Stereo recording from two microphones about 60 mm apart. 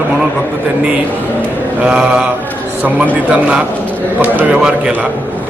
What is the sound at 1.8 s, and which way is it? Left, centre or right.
Speech, centre.